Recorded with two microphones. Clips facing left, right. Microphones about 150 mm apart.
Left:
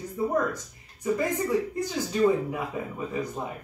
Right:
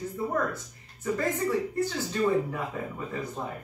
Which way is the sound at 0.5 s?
15° left (ahead or behind).